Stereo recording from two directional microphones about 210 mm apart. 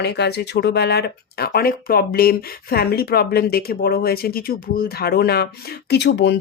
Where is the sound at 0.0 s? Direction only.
50° left (ahead or behind).